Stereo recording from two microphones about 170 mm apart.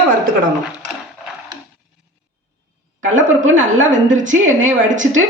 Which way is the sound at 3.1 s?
50° right (ahead or behind).